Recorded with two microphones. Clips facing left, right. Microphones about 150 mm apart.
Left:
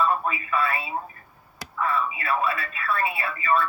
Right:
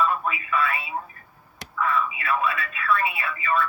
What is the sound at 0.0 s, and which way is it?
Speech, 35° left (ahead or behind).